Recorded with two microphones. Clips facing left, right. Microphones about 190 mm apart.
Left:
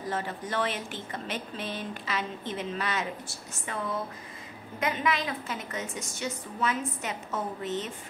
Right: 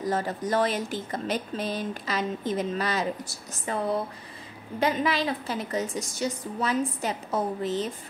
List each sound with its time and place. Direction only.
0.0 s speech: 40° right (ahead or behind)
4.7 s speech: 35° right (ahead or behind)